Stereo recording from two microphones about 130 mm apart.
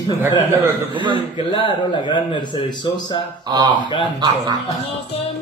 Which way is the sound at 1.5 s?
40° left (ahead or behind).